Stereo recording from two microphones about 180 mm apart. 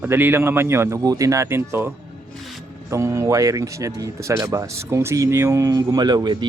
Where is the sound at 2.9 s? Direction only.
15° right (ahead or behind).